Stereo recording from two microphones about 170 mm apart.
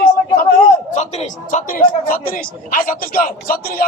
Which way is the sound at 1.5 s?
50° left (ahead or behind).